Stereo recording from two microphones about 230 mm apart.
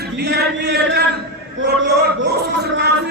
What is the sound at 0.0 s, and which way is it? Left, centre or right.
A man's voice, right.